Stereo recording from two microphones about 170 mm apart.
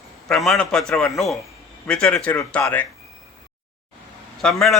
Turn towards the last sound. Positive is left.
turn(degrees=5)  # may be behind; listen again after turning